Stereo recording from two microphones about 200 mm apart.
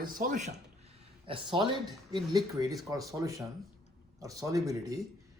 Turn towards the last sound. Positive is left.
turn(degrees=-15)  # may be behind; listen again after turning